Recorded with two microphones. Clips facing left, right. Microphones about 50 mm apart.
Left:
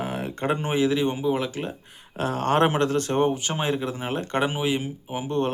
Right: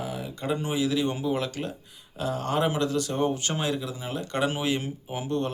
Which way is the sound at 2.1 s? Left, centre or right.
Left.